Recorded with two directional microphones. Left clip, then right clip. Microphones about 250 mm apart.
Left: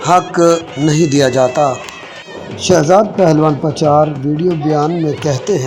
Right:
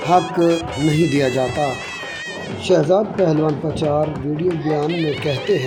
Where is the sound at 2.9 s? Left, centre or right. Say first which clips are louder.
Left 7 dB; left.